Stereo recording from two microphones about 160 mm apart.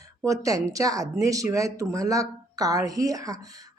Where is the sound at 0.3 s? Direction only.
20° right (ahead or behind).